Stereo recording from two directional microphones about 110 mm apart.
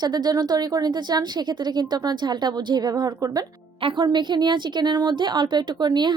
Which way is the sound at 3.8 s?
50° right (ahead or behind).